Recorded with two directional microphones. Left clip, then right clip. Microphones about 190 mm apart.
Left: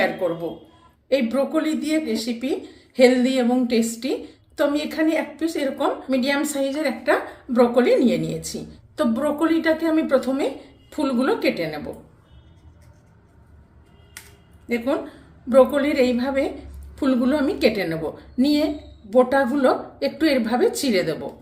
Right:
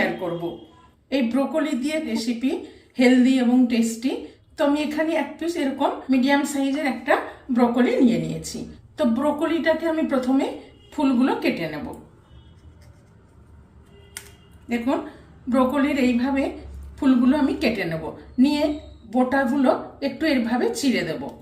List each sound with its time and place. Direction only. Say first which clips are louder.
1.1 s a woman's voice: left 2 dB; 55° left (ahead or behind)
15.4 s a woman's voice: left 5 dB; 50° left (ahead or behind)